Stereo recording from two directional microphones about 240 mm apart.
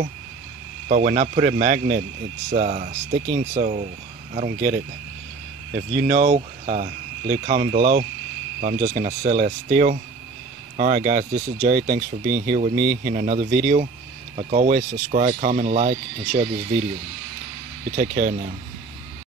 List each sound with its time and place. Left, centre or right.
0.8 s speech: right
5.8 s speech: right
17.9 s speech: right